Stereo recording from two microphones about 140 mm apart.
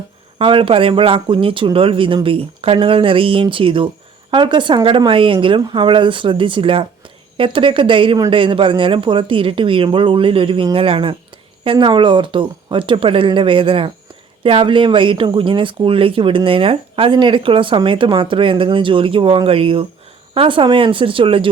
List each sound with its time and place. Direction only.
0.3 s speech: 40° right (ahead or behind)